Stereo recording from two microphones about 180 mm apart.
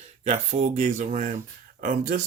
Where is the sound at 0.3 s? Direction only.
40° right (ahead or behind).